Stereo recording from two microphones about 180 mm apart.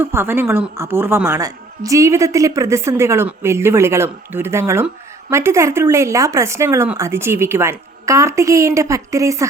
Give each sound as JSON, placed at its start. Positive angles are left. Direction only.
{"t": 0.0, "sound": "a woman's voice", "side_deg": -15}